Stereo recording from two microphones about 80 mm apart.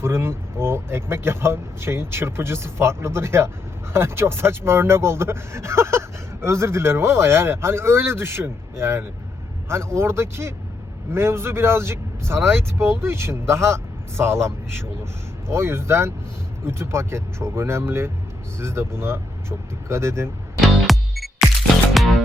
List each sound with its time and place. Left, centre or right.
0.0 s speech: right
20.6 s music: centre